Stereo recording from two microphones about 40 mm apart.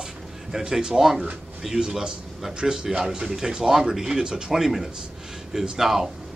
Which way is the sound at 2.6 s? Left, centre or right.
Right.